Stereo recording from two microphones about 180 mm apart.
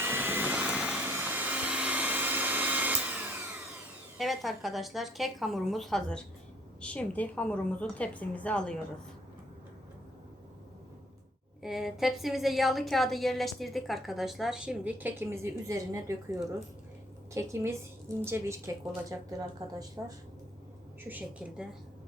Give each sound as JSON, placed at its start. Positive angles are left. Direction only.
{"t": 0.0, "sound": "vehicle", "side_deg": -10}
{"t": 4.2, "sound": "a woman's voice", "side_deg": 0}
{"t": 11.6, "sound": "a woman's voice", "side_deg": 0}
{"t": 21.1, "sound": "a woman's voice", "side_deg": -10}